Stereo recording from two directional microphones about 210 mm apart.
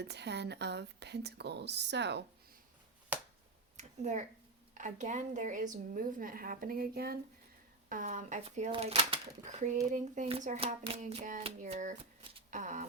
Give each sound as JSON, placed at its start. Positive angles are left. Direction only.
{"t": 0.0, "sound": "speech", "side_deg": -55}
{"t": 3.1, "sound": "finger snapping", "side_deg": -10}
{"t": 3.8, "sound": "speech", "side_deg": -35}
{"t": 12.5, "sound": "a sound", "side_deg": -35}